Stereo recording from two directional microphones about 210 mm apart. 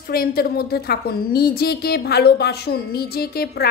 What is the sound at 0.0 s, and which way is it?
A woman's voice, 45° left (ahead or behind).